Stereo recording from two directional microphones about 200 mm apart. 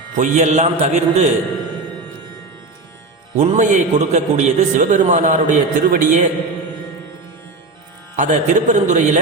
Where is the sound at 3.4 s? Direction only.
35° right (ahead or behind).